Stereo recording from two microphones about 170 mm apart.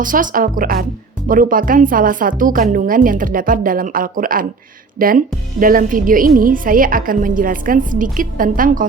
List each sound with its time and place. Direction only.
0.0 s a woman's voice: 50° right (ahead or behind)